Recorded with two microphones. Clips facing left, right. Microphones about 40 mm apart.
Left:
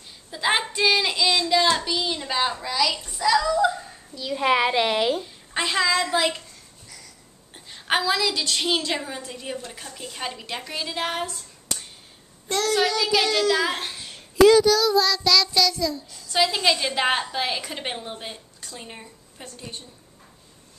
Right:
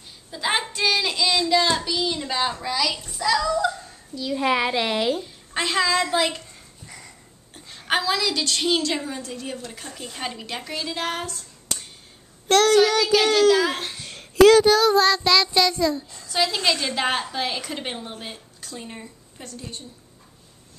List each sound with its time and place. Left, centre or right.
0.3 s a child's voice: centre
7.9 s a woman's voice: centre
12.4 s a child's voice: right
13.6 s a child's voice: centre
14.3 s speech: right
14.6 s child singing: right
16.3 s a child's voice: centre
19.4 s a woman's voice: left